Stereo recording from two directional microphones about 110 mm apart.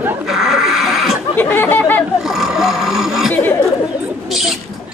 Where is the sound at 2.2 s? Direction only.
5° right (ahead or behind).